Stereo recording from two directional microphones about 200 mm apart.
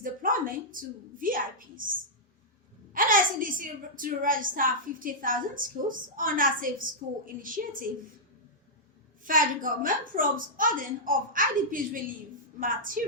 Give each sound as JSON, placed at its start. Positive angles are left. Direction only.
{"t": 0.0, "sound": "a sound", "side_deg": -45}
{"t": 2.9, "sound": "a woman's voice", "side_deg": -45}
{"t": 9.2, "sound": "a woman's voice", "side_deg": -45}